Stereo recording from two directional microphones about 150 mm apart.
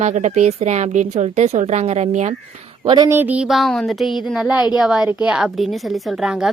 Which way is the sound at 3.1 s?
10° right (ahead or behind).